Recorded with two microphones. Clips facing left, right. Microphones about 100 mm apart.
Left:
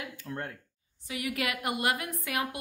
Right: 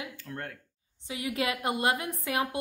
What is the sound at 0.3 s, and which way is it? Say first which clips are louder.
Speech: left 4 dB; 20° left (ahead or behind).